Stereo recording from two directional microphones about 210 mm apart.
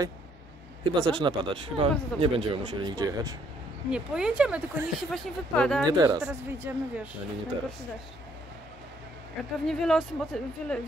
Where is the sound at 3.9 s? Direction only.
5° right (ahead or behind).